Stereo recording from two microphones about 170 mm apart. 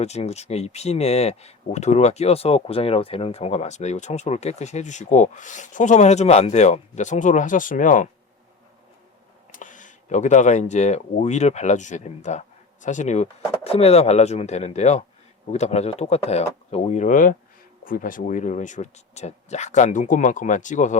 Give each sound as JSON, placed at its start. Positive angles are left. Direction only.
{"t": 0.0, "sound": "speech", "side_deg": 40}
{"t": 9.5, "sound": "speech", "side_deg": 50}